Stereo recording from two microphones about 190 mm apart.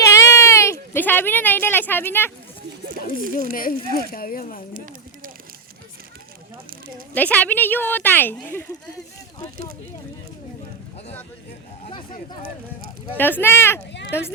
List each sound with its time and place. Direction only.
0.0 s baby cry: 15° left (ahead or behind)
3.5 s speech: 50° left (ahead or behind)
7.1 s a woman's voice: 10° left (ahead or behind)
13.1 s a woman's voice: 10° left (ahead or behind)